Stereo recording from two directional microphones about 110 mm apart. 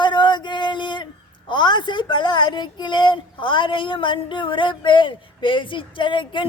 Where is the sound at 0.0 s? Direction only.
45° left (ahead or behind).